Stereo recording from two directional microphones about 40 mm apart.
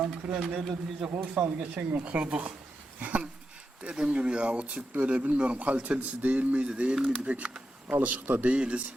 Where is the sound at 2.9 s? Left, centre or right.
Right.